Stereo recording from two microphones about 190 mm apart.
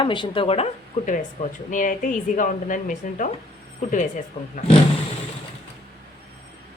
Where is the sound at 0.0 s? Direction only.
25° left (ahead or behind); by 3.2 s 45° left (ahead or behind).